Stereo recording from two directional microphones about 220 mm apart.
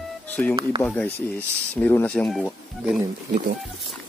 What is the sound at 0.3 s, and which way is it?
Speech, 5° left (ahead or behind).